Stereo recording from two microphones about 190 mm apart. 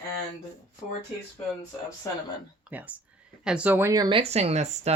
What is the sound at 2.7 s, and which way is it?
Speech, 10° right (ahead or behind).